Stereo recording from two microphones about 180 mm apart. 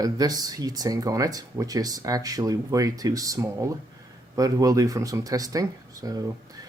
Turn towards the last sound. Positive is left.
turn(degrees=-20)  # may be behind; listen again after turning